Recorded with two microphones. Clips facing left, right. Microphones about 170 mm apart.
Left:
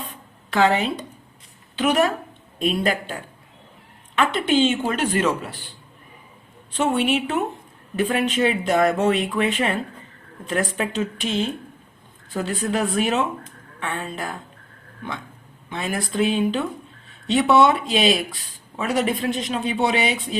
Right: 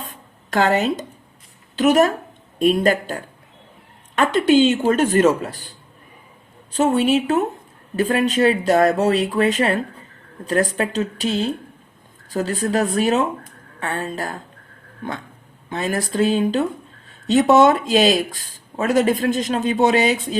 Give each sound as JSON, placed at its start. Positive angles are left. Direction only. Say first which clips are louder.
{"t": 0.0, "sound": "a sound", "louder": "even", "side_deg": -40}
{"t": 1.7, "sound": "speech", "louder": "right 4 dB", "side_deg": -40}
{"t": 6.7, "sound": "speech", "louder": "right 4 dB", "side_deg": -40}